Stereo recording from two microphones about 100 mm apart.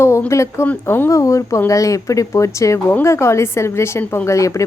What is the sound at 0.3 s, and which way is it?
A woman's voice, 30° left (ahead or behind).